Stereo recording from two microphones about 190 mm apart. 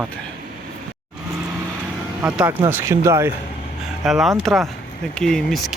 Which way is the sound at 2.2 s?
10° right (ahead or behind).